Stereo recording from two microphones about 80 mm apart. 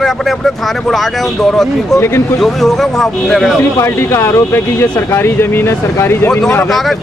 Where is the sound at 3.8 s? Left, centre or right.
Left.